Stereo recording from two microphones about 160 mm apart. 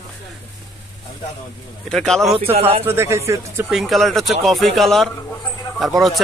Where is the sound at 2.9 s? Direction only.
15° right (ahead or behind).